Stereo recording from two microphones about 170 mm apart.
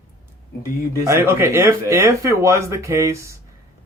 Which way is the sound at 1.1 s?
15° right (ahead or behind).